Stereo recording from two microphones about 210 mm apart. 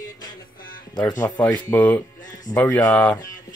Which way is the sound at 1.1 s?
15° left (ahead or behind).